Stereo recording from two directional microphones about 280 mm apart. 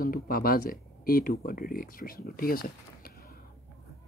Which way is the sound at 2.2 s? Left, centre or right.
Left.